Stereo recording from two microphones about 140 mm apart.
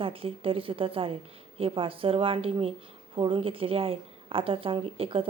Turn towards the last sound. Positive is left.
turn(degrees=-40)  # may be behind; listen again after turning